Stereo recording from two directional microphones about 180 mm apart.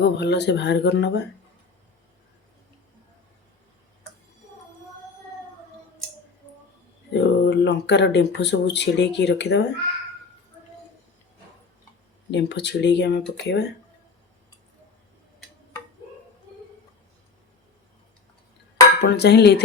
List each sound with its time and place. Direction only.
0.0 s speech: 70° left (ahead or behind)
7.1 s a sound: 75° left (ahead or behind)
8.4 s speech: 70° left (ahead or behind)
12.3 s speech: 75° left (ahead or behind)
19.0 s speech: 65° left (ahead or behind)